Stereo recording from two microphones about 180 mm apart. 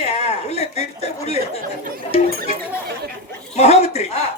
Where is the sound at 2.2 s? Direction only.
55° right (ahead or behind).